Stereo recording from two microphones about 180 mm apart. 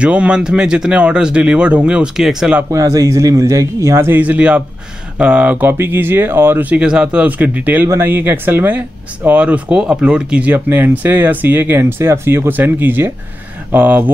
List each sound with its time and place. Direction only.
0.0 s speech: 5° right (ahead or behind)
2.7 s speech: 20° right (ahead or behind)